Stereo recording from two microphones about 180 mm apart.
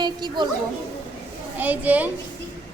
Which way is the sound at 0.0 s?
25° right (ahead or behind).